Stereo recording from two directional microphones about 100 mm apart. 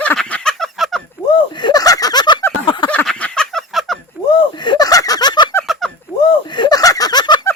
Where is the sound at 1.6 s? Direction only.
45° left (ahead or behind).